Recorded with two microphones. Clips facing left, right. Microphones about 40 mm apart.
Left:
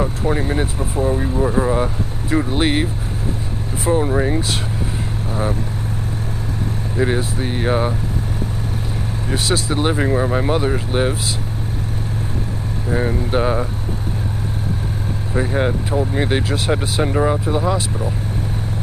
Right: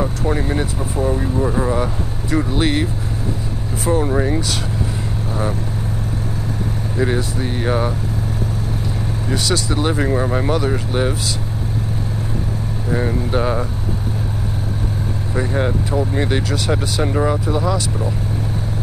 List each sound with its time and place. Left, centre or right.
0.0 s speech: centre
2.3 s speech: centre
3.9 s speech: centre
7.0 s speech: centre
9.3 s speech: left
10.0 s speech: centre
10.9 s speech: centre
12.9 s speech: centre
15.3 s speech: centre
17.0 s speech: centre
17.5 s speech: left